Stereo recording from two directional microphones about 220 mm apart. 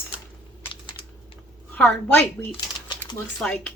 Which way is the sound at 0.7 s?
20° left (ahead or behind).